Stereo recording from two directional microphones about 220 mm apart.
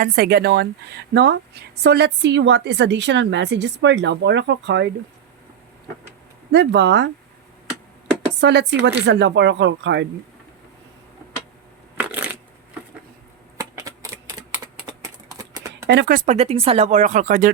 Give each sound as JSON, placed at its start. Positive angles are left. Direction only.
{"t": 0.0, "sound": "a woman's voice", "side_deg": -45}
{"t": 6.5, "sound": "a woman's voice", "side_deg": -50}
{"t": 8.4, "sound": "a woman's voice", "side_deg": -50}
{"t": 11.9, "sound": "shuffling cards", "side_deg": -10}
{"t": 13.6, "sound": "typing", "side_deg": -15}
{"t": 15.5, "sound": "a sound", "side_deg": -15}
{"t": 15.9, "sound": "speech", "side_deg": -45}